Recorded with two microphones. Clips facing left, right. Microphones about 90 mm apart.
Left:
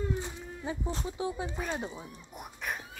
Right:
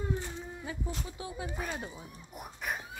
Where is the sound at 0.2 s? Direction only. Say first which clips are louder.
Left 2 dB; 25° left (ahead or behind).